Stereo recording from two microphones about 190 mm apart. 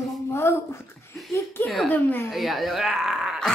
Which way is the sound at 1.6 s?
Centre (ahead or behind).